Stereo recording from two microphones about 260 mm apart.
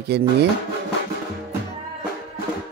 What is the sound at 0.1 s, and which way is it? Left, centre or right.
Speech, right.